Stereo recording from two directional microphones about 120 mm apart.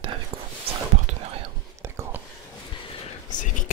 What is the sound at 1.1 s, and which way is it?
Whispering, 75° right (ahead or behind).